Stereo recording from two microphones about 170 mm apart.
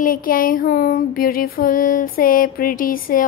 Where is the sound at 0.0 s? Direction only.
55° left (ahead or behind).